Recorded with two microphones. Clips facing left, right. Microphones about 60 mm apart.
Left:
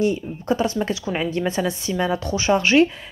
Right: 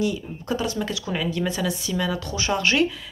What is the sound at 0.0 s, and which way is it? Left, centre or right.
Speech, left.